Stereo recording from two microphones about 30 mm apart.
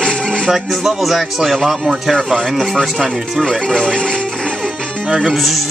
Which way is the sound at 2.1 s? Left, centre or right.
Centre.